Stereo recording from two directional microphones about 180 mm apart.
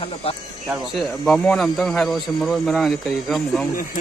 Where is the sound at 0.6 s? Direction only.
Centre (ahead or behind).